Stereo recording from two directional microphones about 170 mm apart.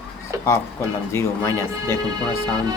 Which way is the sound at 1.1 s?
15° left (ahead or behind).